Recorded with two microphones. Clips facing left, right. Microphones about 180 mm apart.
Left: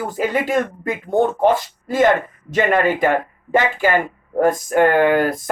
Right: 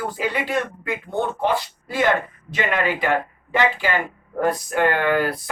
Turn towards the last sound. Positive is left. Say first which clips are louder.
# left 5 dB
turn(degrees=45)  # may be behind; listen again after turning